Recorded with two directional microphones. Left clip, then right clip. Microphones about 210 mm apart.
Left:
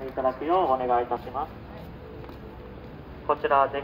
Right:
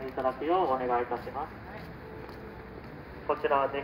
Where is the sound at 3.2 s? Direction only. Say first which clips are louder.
Left 5 dB; 40° left (ahead or behind).